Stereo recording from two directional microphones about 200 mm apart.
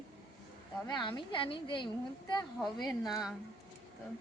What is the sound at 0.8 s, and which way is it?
A woman's voice, 20° left (ahead or behind).